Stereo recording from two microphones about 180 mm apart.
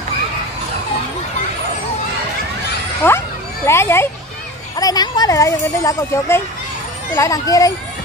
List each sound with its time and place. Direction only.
3.0 s speech: 10° left (ahead or behind)